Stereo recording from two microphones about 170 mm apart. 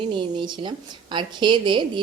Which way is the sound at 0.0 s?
30° right (ahead or behind).